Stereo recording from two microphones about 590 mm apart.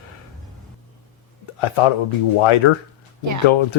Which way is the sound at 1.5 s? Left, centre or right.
Left.